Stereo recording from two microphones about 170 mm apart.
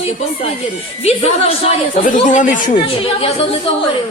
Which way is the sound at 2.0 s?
45° left (ahead or behind).